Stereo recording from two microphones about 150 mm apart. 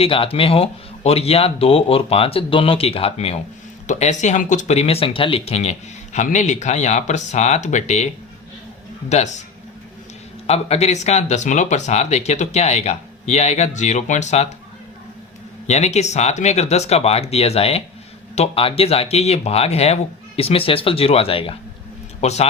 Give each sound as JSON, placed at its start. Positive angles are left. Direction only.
{"t": 0.0, "sound": "speech", "side_deg": 40}
{"t": 10.4, "sound": "speech", "side_deg": 45}
{"t": 15.6, "sound": "speech", "side_deg": 45}